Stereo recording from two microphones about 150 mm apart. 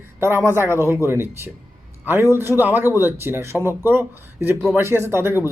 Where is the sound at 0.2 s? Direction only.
15° right (ahead or behind).